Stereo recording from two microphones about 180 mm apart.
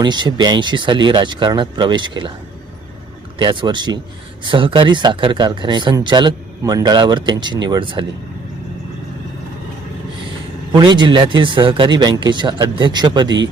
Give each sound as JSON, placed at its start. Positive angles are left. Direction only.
{"t": 0.0, "sound": "speech", "side_deg": -25}
{"t": 3.3, "sound": "speech", "side_deg": -25}
{"t": 10.7, "sound": "speech", "side_deg": -25}